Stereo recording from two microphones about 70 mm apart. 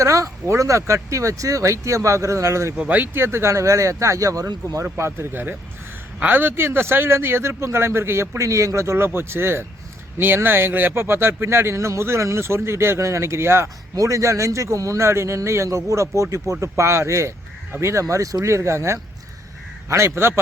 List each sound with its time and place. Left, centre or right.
0.0 s a man's voice: right
2.7 s a man's voice: right
4.9 s a man's voice: right
13.9 s a man's voice: right
18.1 s a man's voice: right